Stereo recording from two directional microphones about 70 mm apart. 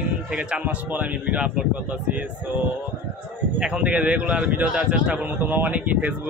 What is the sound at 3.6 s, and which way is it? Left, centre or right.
A man's voice, centre.